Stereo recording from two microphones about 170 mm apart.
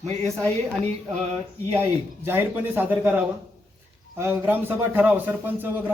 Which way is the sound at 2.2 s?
10° right (ahead or behind).